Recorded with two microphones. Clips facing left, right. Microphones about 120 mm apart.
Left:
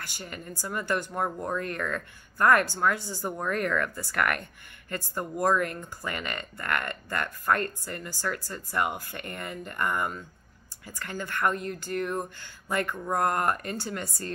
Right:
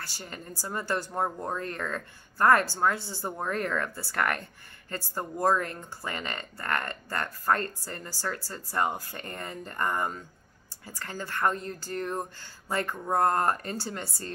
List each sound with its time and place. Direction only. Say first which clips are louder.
0.0 s speech: left 1 dB; 30° right (ahead or behind)